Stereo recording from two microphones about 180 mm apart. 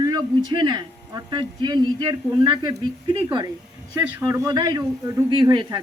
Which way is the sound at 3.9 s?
15° right (ahead or behind).